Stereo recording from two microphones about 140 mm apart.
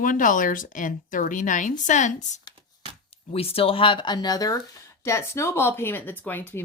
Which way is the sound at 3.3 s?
45° left (ahead or behind).